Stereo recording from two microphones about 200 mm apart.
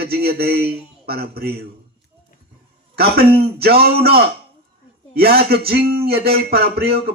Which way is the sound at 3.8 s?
50° right (ahead or behind).